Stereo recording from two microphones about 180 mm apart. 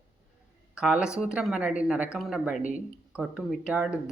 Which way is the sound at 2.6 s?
45° left (ahead or behind).